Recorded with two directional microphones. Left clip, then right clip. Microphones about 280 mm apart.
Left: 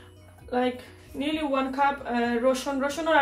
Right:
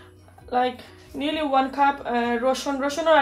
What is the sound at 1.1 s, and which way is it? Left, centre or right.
Speech, right.